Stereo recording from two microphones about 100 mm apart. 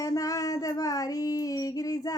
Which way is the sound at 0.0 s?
35° left (ahead or behind).